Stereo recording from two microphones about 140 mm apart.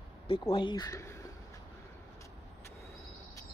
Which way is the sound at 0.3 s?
35° left (ahead or behind).